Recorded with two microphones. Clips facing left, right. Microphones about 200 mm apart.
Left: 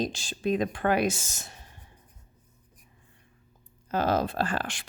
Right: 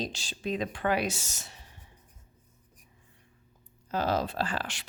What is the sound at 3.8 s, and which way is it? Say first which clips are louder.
Speech: left 3 dB; 55° left (ahead or behind).